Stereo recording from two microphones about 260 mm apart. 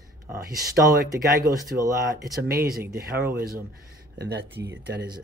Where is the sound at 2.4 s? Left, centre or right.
Right.